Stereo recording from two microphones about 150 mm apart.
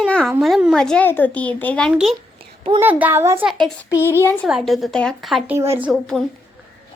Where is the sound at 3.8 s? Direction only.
15° left (ahead or behind).